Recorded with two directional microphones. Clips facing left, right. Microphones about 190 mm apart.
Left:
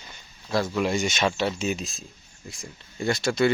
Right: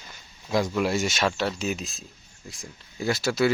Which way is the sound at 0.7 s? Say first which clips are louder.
Even; 5° right (ahead or behind).